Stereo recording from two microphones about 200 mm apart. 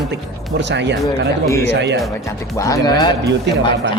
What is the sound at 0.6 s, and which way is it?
Speech, 60° right (ahead or behind).